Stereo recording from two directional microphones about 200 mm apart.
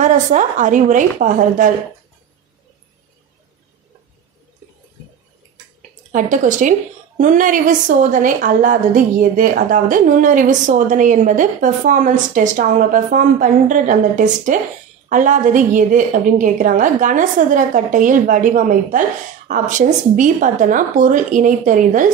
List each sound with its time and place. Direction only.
0.0 s a woman's voice: 40° right (ahead or behind)
5.8 s a sound: 40° right (ahead or behind)
7.2 s a woman's voice: 40° right (ahead or behind)